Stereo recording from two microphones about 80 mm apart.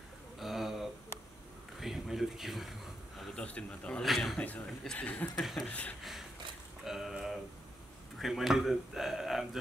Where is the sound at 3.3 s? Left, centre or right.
Centre.